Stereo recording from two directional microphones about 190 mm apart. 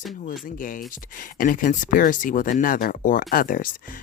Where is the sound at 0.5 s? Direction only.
45° left (ahead or behind).